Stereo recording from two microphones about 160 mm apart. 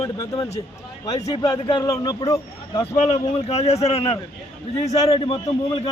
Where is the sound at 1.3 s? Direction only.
20° left (ahead or behind).